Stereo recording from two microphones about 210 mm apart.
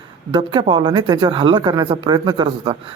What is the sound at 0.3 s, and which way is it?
Speech, 20° right (ahead or behind).